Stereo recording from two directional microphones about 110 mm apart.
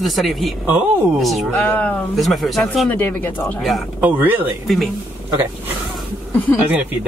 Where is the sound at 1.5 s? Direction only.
15° left (ahead or behind).